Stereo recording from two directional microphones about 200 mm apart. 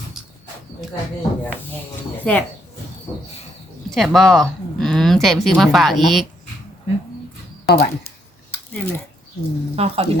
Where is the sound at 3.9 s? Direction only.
Centre (ahead or behind).